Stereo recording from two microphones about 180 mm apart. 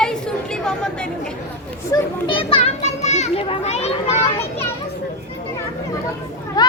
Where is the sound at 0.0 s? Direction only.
5° left (ahead or behind).